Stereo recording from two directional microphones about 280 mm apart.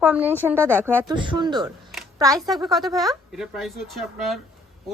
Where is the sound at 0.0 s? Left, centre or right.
Centre.